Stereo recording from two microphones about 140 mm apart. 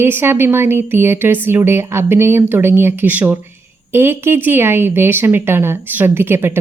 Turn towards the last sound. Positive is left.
turn(degrees=-15)  # may be behind; listen again after turning